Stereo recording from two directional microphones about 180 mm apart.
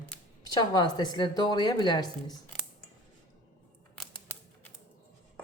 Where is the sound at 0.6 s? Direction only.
25° left (ahead or behind).